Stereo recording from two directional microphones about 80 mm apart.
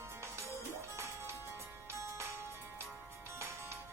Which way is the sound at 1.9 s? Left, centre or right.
Right.